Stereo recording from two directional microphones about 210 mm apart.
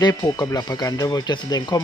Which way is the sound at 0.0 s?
15° left (ahead or behind).